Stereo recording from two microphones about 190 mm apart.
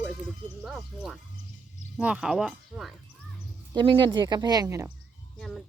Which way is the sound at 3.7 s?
25° right (ahead or behind).